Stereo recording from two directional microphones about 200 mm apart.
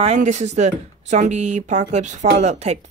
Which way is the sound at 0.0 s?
35° right (ahead or behind).